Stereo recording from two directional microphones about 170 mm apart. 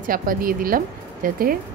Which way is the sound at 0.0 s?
55° right (ahead or behind).